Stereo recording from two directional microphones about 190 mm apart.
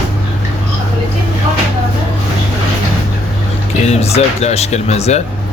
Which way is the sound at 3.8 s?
35° left (ahead or behind).